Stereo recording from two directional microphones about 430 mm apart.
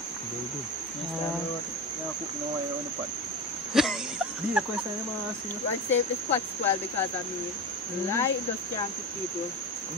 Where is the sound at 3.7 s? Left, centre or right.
Centre.